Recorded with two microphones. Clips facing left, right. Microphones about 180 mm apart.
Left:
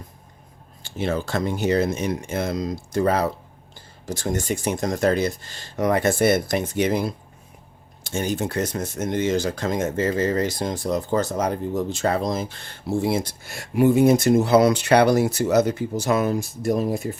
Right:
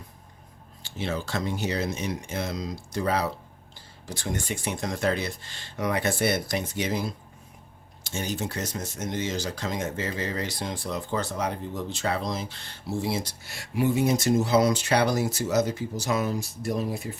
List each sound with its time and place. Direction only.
0.8 s speech: 50° left (ahead or behind)